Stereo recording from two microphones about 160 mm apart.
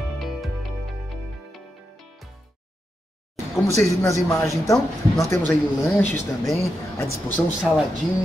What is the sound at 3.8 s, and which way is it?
Speech, 20° left (ahead or behind).